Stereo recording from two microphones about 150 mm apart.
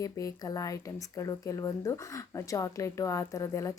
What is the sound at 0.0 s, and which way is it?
A woman's voice, 20° left (ahead or behind).